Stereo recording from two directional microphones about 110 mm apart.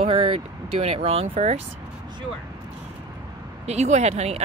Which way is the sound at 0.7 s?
65° right (ahead or behind).